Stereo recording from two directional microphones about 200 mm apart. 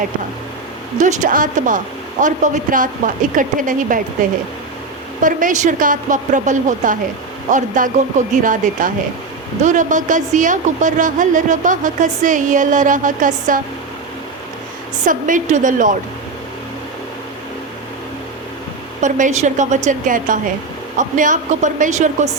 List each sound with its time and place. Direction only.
0.9 s a woman's voice: 35° right (ahead or behind)
15.0 s a woman's voice: 40° right (ahead or behind)
19.0 s a woman's voice: 40° right (ahead or behind)